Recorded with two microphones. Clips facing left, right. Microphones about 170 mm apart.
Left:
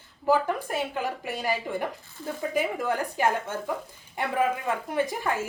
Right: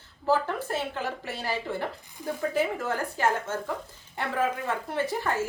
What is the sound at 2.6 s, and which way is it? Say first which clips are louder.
Speech: left 2 dB; 15° left (ahead or behind).